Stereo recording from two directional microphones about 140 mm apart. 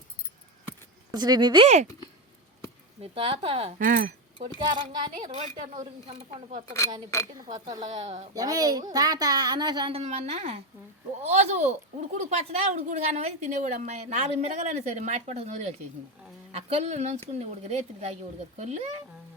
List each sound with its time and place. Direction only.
1.1 s a woman's voice: 30° right (ahead or behind)
1.6 s a woman's voice: 55° right (ahead or behind)
3.0 s a woman's voice: 40° right (ahead or behind)
3.8 s speech: 85° right
4.4 s a woman's voice: 35° right (ahead or behind)
9.9 s a woman's voice: 50° right (ahead or behind)